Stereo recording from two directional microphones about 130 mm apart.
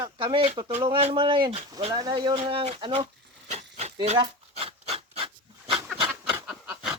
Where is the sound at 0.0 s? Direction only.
40° right (ahead or behind).